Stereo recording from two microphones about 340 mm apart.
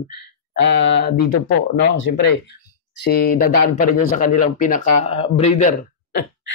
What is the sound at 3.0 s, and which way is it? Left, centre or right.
Speech, left.